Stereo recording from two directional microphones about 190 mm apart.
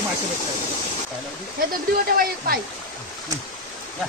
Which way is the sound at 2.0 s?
50° right (ahead or behind).